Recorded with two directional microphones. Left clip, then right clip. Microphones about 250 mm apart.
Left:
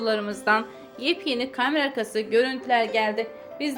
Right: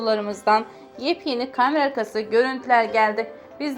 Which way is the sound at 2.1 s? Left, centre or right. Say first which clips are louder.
Right 2 dB; centre.